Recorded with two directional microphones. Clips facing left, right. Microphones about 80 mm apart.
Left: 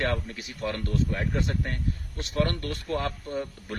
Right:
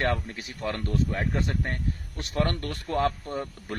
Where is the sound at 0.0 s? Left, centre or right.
Right.